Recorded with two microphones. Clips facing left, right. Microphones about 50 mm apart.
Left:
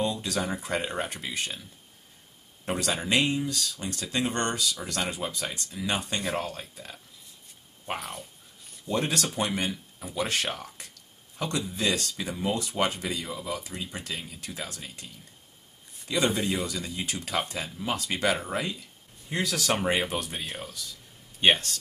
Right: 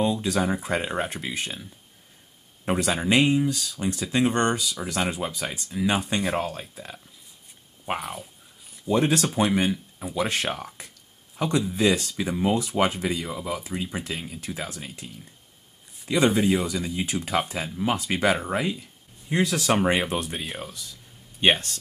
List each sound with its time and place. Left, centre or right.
0.0 s speech: centre
8.0 s speech: centre
8.8 s speech: centre